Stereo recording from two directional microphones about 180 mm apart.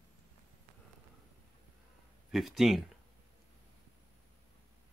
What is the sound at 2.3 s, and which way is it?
Speech, centre (ahead or behind).